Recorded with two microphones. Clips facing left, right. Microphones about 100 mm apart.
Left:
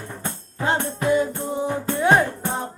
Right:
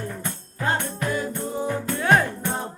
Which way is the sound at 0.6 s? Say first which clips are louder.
Left 3 dB; 25° left (ahead or behind).